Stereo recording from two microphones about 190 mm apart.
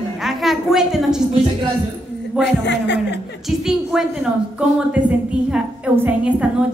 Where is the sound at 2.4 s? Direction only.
65° left (ahead or behind).